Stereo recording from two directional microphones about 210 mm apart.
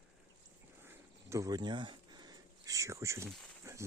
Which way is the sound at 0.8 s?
10° right (ahead or behind).